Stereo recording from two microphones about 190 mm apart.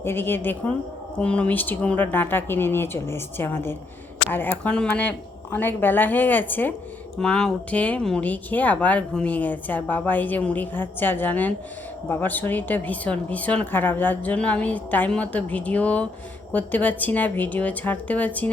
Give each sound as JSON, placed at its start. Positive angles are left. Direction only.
{"t": 0.0, "sound": "speech", "side_deg": 10}